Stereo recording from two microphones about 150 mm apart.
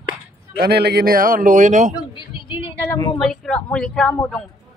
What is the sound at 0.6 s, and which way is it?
A man's voice, 90° right.